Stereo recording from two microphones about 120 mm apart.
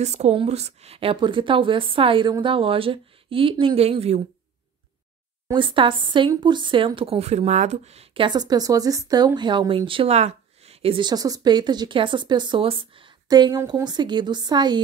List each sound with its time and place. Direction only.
0.0 s a woman's voice: 70° right (ahead or behind)
5.5 s a woman's voice: 45° right (ahead or behind)
7.0 s a woman's voice: 55° right (ahead or behind)
11.1 s speech: 30° right (ahead or behind); by 13.1 s 50° right (ahead or behind)
13.3 s speech: 35° right (ahead or behind)